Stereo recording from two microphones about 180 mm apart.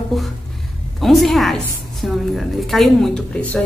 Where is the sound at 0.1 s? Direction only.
Centre (ahead or behind).